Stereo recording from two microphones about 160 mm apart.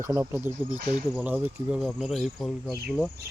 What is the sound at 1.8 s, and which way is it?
Speech, centre (ahead or behind).